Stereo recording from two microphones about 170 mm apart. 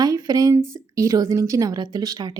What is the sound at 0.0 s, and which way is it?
A woman's voice, 20° right (ahead or behind).